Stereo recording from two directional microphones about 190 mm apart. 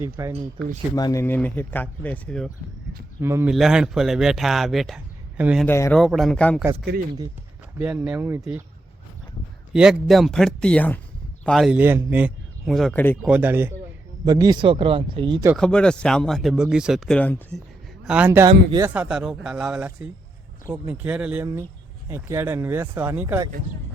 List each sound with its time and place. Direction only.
0.0 s speech: 15° right (ahead or behind)
0.9 s speech: 20° left (ahead or behind)
3.2 s speech: 15° right (ahead or behind)
3.5 s speech: centre (ahead or behind)
5.6 s speech: 10° left (ahead or behind)
6.0 s speech: centre (ahead or behind)
7.8 s speech: 5° right (ahead or behind)
9.7 s speech: 5° right (ahead or behind)
13.2 s speech: 10° right (ahead or behind); by 15.4 s 25° right (ahead or behind)
15.5 s speech: 5° left (ahead or behind)
18.0 s speech: 5° right (ahead or behind)
18.9 s speech: 5° right (ahead or behind)